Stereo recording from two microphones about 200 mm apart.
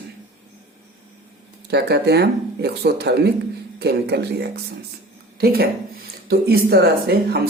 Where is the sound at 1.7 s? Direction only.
55° right (ahead or behind).